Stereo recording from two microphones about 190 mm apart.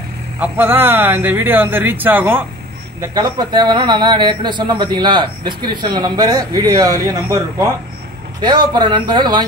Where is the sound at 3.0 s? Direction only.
20° right (ahead or behind).